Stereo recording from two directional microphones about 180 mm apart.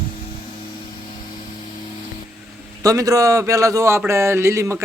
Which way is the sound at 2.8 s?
20° right (ahead or behind).